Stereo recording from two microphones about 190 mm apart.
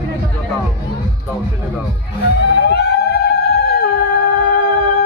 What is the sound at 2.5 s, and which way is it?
Music, 60° left (ahead or behind).